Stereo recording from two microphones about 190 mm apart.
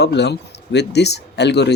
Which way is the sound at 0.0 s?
60° left (ahead or behind).